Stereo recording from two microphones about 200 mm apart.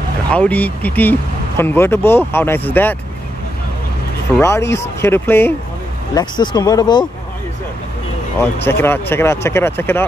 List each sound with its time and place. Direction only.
0.3 s speech: 5° left (ahead or behind)
4.4 s speech: 15° left (ahead or behind)
6.1 s speech: 20° left (ahead or behind)
8.4 s speech: 10° left (ahead or behind)